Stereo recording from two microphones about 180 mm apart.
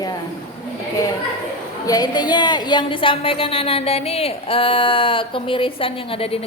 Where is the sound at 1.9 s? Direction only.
20° left (ahead or behind).